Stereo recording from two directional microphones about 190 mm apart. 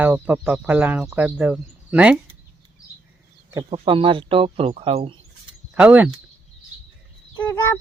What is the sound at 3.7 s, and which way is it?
Speech, 30° right (ahead or behind).